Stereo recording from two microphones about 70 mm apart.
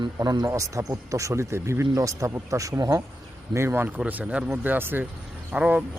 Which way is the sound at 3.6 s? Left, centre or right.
Right.